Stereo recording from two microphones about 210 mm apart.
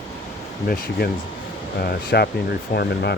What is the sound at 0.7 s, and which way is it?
Speech, 45° left (ahead or behind).